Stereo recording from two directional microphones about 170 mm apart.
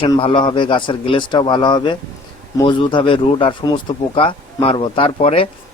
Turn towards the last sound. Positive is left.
turn(degrees=35)  # may be behind; listen again after turning